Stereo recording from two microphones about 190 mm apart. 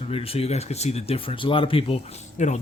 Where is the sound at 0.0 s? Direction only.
30° left (ahead or behind).